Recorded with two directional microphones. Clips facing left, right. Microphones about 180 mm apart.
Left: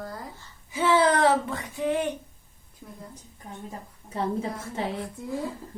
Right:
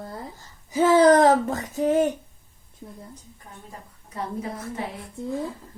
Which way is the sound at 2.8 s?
20° right (ahead or behind).